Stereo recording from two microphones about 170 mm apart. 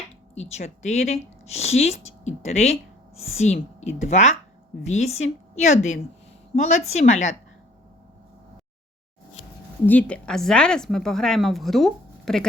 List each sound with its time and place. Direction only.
0.3 s a woman's voice: 40° left (ahead or behind)
9.8 s a woman's voice: 10° left (ahead or behind)